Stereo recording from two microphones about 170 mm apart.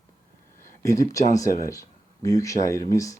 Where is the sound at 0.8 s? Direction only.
20° left (ahead or behind).